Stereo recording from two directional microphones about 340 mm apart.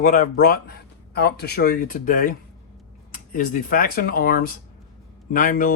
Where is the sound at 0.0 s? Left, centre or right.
Left.